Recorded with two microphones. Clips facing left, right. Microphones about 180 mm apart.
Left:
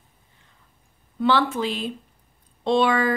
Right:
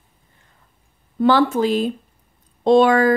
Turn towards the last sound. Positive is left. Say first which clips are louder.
# right 7 dB
turn(degrees=-45)  # may be behind; listen again after turning